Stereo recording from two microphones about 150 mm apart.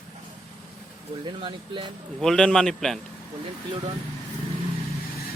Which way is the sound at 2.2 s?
5° left (ahead or behind).